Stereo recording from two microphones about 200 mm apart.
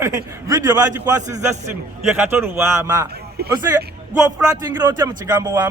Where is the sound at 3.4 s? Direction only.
50° right (ahead or behind).